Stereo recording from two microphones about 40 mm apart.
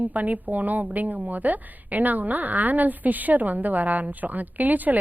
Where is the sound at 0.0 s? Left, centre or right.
Right.